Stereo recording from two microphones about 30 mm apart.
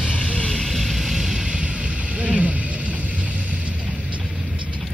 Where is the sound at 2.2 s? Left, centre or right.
Right.